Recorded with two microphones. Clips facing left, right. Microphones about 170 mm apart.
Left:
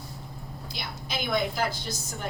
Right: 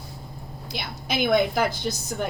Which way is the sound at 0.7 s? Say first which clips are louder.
Right 6 dB; 70° right (ahead or behind).